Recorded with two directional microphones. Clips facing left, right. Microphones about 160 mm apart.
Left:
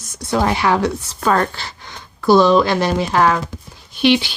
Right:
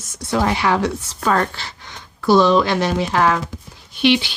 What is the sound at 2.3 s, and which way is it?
Speech, 40° left (ahead or behind).